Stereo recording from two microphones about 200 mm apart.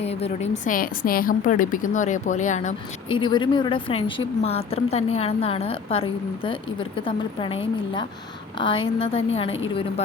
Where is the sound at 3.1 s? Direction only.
25° left (ahead or behind).